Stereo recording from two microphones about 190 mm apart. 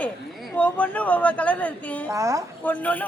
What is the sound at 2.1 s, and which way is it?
Speech, 15° right (ahead or behind).